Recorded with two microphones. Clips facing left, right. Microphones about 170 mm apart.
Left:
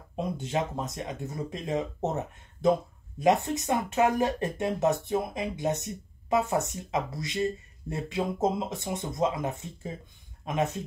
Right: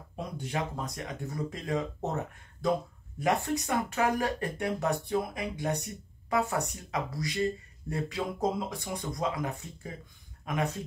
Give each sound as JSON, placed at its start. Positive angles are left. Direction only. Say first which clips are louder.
{"t": 0.1, "sound": "speech", "louder": "left 5 dB", "side_deg": 20}